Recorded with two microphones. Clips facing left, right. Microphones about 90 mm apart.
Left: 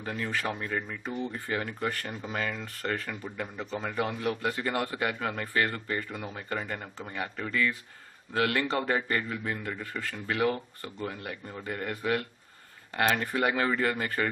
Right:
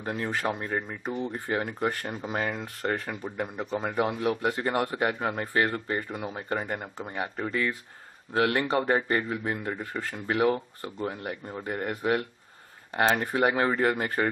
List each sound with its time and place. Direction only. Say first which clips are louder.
0.1 s speech: right 3 dB; 30° right (ahead or behind)
9.0 s speech: right 3 dB; 30° right (ahead or behind)